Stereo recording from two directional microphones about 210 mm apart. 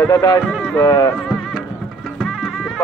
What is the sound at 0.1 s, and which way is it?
Speech, 20° left (ahead or behind).